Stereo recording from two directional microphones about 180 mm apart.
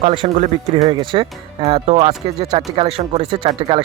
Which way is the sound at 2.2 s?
20° right (ahead or behind).